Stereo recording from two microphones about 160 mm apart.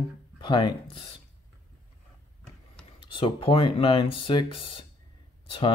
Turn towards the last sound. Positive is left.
turn(degrees=35)  # may be behind; listen again after turning